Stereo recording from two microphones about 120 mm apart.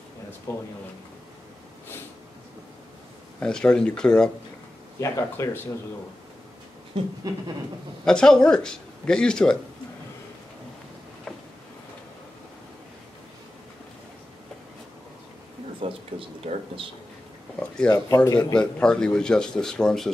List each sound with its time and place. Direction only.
0.5 s speech: 20° left (ahead or behind)
3.3 s speech: 10° left (ahead or behind)
5.0 s speech: 25° left (ahead or behind)
7.2 s a sound: 30° right (ahead or behind)
8.0 s speech: 5° left (ahead or behind)
15.8 s a sound: 55° right (ahead or behind)
17.8 s speech: 30° left (ahead or behind)
18.6 s speech: 5° left (ahead or behind)